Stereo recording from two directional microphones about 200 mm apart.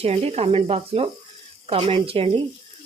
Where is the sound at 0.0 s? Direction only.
30° right (ahead or behind).